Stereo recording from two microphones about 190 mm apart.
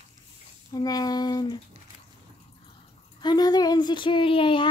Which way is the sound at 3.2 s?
20° left (ahead or behind).